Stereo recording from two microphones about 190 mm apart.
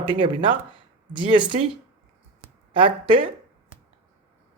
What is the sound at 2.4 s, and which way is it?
Speech, 25° right (ahead or behind).